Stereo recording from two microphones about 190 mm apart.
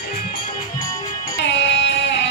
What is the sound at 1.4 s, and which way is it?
Music, 65° left (ahead or behind).